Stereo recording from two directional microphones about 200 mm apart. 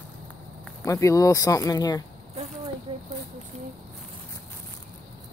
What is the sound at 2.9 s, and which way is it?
Speech, 25° right (ahead or behind).